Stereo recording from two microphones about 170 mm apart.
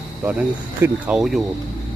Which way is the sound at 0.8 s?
5° right (ahead or behind).